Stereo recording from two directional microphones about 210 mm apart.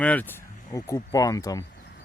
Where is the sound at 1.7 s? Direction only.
55° left (ahead or behind).